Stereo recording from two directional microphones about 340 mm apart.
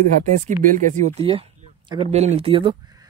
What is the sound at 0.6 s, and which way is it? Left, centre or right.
Speech, right.